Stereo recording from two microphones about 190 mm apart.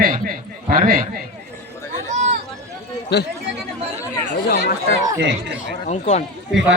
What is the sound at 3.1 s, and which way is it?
Speech, 60° left (ahead or behind).